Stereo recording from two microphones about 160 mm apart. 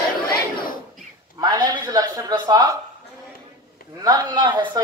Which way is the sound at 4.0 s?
25° right (ahead or behind).